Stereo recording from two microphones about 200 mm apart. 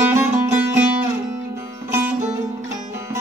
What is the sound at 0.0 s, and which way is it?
Music, 10° right (ahead or behind).